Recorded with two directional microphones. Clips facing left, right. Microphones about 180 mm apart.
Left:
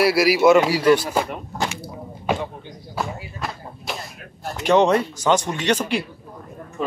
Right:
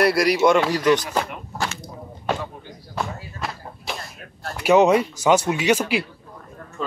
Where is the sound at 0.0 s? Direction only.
5° left (ahead or behind).